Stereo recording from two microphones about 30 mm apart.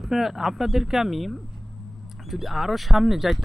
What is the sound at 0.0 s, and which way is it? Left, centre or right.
Speech, centre.